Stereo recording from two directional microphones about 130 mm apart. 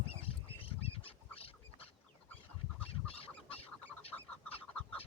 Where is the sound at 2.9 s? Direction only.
45° left (ahead or behind).